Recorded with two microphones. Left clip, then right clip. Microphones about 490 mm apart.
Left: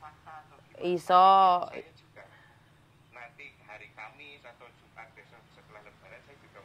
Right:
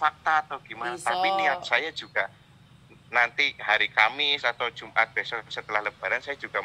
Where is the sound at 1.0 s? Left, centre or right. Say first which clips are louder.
Left 5 dB; left.